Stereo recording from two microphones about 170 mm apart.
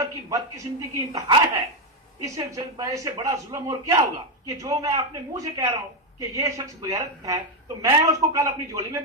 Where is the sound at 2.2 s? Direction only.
20° right (ahead or behind).